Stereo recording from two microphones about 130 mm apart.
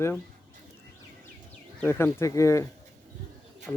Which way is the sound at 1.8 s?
20° left (ahead or behind).